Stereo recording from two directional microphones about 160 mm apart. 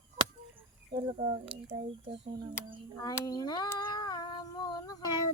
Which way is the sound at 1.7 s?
30° right (ahead or behind).